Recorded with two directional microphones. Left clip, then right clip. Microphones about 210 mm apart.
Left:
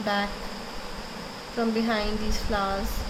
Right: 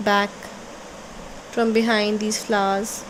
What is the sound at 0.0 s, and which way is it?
Speech, 50° right (ahead or behind).